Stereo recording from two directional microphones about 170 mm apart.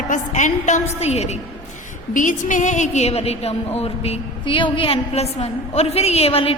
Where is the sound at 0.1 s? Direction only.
45° left (ahead or behind).